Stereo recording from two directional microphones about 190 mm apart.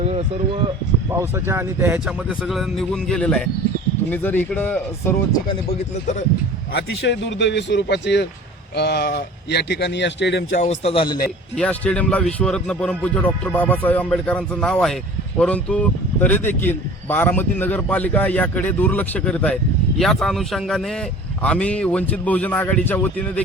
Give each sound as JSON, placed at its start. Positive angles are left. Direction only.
{"t": 0.0, "sound": "a sound", "side_deg": -35}
{"t": 1.1, "sound": "speech", "side_deg": -15}
{"t": 2.5, "sound": "speech", "side_deg": 0}
{"t": 5.5, "sound": "speech", "side_deg": 35}
{"t": 6.7, "sound": "speech", "side_deg": 65}
{"t": 10.5, "sound": "speech", "side_deg": 40}
{"t": 11.5, "sound": "speech", "side_deg": 5}